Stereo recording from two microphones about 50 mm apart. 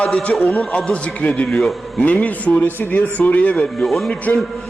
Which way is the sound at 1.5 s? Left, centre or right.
Centre.